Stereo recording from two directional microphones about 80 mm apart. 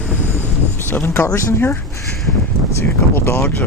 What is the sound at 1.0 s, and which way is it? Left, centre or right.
Speech, left.